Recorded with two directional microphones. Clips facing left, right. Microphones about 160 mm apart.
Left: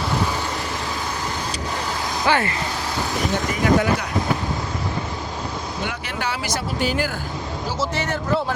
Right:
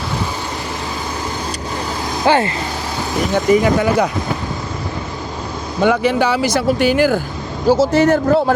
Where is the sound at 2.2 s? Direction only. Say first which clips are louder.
Right 6 dB; 25° right (ahead or behind).